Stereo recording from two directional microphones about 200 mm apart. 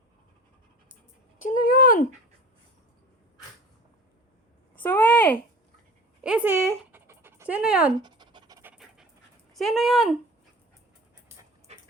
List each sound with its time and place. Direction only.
1.4 s a sound: 40° left (ahead or behind)
4.7 s a sound: 10° left (ahead or behind)
6.2 s speech: 5° right (ahead or behind)
7.9 s pant: 20° right (ahead or behind)
8.7 s dog: centre (ahead or behind)
9.6 s speech: centre (ahead or behind)
11.7 s dog: 30° right (ahead or behind)